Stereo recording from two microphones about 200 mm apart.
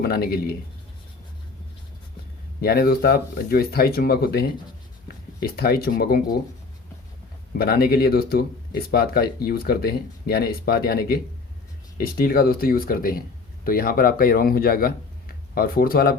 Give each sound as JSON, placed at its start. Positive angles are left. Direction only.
{"t": 0.0, "sound": "speech", "side_deg": 50}
{"t": 2.6, "sound": "speech", "side_deg": 50}
{"t": 7.6, "sound": "speech", "side_deg": 50}